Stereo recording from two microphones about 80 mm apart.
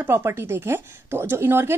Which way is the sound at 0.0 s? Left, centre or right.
Right.